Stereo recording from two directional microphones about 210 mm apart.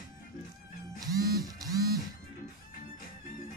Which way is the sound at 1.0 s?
15° right (ahead or behind).